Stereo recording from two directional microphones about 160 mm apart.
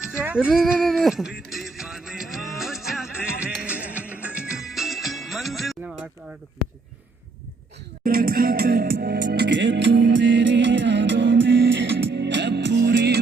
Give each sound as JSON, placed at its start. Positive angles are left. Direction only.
{"t": 0.1, "sound": "speech", "side_deg": -10}
{"t": 1.5, "sound": "music", "side_deg": 0}
{"t": 8.0, "sound": "music", "side_deg": -65}